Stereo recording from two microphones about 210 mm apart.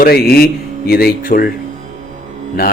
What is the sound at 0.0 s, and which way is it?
Speech, 45° left (ahead or behind).